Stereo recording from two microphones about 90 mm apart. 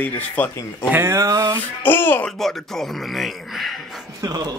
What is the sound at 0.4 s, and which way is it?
Speech, 20° left (ahead or behind).